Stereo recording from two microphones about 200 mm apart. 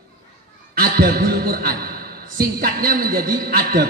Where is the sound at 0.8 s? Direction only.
50° right (ahead or behind).